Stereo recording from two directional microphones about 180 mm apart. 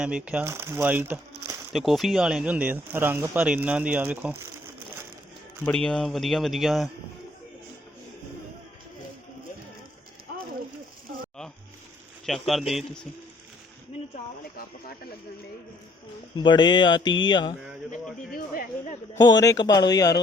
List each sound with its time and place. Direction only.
0.0 s speech: 5° right (ahead or behind)
1.7 s speech: centre (ahead or behind)
5.6 s speech: 5° left (ahead or behind)
12.2 s speech: centre (ahead or behind)
16.4 s speech: 25° left (ahead or behind)
18.3 s speech: 50° left (ahead or behind)
19.2 s speech: 20° left (ahead or behind)